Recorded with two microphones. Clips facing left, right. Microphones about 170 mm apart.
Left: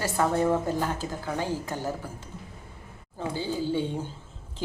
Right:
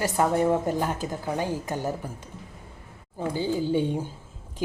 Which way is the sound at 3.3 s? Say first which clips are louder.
Right 3 dB; 15° right (ahead or behind).